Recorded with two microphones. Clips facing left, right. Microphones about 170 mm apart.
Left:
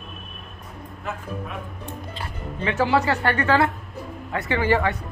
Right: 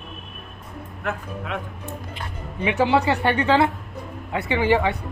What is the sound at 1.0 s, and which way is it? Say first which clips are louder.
Speech: right 2 dB; 85° right.